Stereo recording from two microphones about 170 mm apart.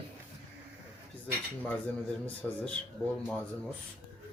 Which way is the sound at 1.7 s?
10° left (ahead or behind).